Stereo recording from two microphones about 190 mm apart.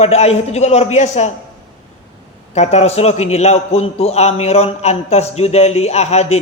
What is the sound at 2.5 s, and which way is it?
A man's voice, 35° left (ahead or behind).